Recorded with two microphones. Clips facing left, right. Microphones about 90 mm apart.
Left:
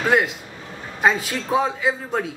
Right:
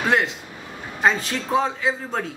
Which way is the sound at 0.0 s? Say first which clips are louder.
Left 2 dB; 5° left (ahead or behind).